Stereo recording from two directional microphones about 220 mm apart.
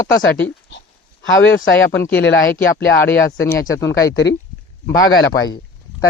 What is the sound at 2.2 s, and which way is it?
Speech, 55° left (ahead or behind).